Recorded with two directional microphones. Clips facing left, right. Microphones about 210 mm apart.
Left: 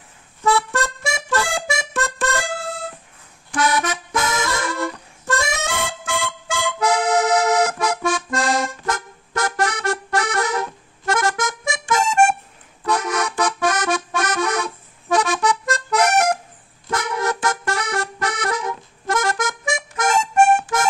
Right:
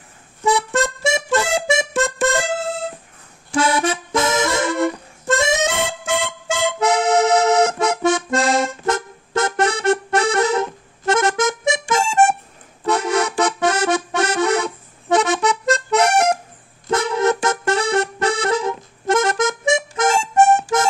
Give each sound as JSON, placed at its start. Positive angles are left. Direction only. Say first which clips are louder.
{"t": 0.4, "sound": "music", "louder": "right 2 dB", "side_deg": -20}
{"t": 12.8, "sound": "accordion", "louder": "right 3 dB", "side_deg": -25}
{"t": 16.9, "sound": "music", "louder": "right 6 dB", "side_deg": -25}